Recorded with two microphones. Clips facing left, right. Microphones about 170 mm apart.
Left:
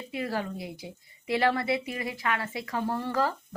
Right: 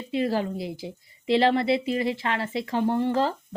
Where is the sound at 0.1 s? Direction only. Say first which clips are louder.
Right 7 dB; 25° right (ahead or behind).